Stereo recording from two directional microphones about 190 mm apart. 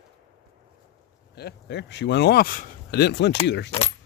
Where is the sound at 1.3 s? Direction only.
60° left (ahead or behind).